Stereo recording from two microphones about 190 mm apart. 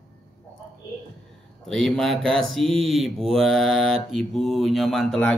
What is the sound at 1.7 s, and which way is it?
Speech, 5° left (ahead or behind).